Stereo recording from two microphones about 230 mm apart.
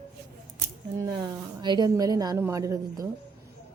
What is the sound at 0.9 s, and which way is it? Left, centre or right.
A woman's voice, centre.